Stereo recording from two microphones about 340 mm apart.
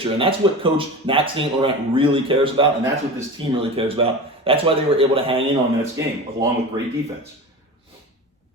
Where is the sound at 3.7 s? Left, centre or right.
Centre.